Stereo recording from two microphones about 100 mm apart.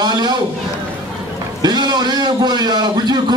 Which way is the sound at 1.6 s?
45° right (ahead or behind).